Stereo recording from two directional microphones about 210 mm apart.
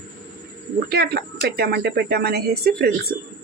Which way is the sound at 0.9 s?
45° right (ahead or behind).